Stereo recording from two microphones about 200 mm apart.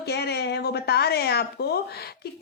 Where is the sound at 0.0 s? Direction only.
55° left (ahead or behind).